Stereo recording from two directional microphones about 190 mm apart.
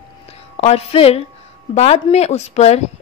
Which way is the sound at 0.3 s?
35° left (ahead or behind).